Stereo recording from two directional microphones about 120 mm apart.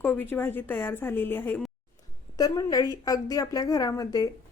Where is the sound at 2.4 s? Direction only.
30° left (ahead or behind).